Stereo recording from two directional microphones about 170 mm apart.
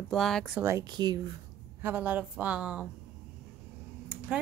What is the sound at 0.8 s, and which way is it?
Speech, 25° right (ahead or behind).